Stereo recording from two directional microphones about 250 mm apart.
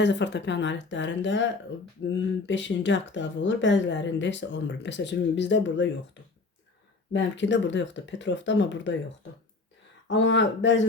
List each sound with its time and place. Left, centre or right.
0.0 s speech: left
10.1 s speech: left